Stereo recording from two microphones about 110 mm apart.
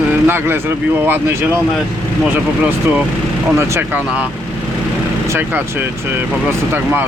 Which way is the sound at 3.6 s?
15° right (ahead or behind).